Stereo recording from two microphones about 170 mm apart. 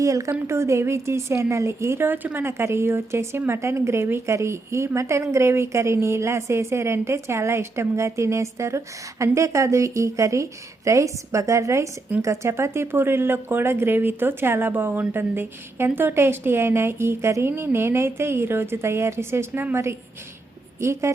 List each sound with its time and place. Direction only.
0.0 s a woman's voice: 20° right (ahead or behind)